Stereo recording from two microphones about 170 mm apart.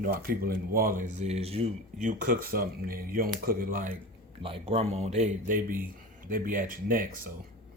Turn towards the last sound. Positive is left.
turn(degrees=-55)  # may be behind; listen again after turning